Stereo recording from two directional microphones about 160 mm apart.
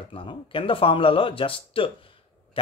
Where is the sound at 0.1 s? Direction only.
30° left (ahead or behind).